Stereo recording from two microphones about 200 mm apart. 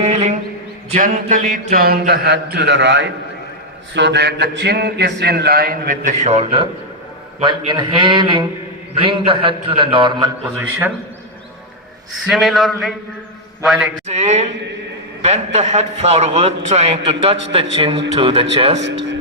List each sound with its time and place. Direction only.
0.0 s a sound: 35° right (ahead or behind)
0.9 s a man's voice: 40° right (ahead or behind); by 10.3 s 20° right (ahead or behind)
10.6 s a man's voice: 10° right (ahead or behind)
12.3 s a man's voice: centre (ahead or behind)
14.1 s a man's voice: 35° right (ahead or behind)
18.8 s speech: 65° right (ahead or behind)